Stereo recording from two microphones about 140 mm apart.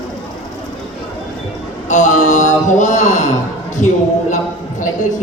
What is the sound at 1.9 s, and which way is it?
Speech, 60° left (ahead or behind).